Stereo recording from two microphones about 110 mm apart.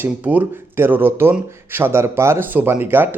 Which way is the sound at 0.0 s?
15° right (ahead or behind).